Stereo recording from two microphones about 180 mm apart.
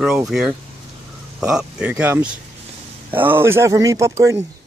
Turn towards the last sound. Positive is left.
turn(degrees=-15)  # may be behind; listen again after turning